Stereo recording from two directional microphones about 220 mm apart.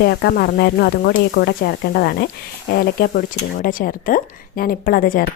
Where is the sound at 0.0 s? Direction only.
50° left (ahead or behind).